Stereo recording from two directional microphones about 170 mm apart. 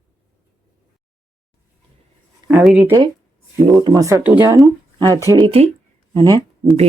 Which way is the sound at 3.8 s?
20° right (ahead or behind).